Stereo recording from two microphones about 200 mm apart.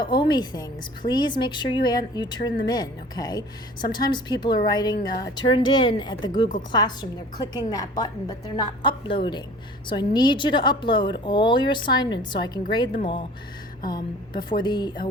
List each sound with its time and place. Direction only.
0.0 s a woman's voice: 20° left (ahead or behind)